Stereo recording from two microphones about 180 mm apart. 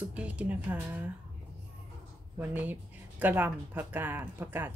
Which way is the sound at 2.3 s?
10° right (ahead or behind).